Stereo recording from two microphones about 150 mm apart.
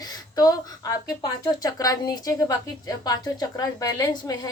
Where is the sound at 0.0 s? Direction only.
25° left (ahead or behind).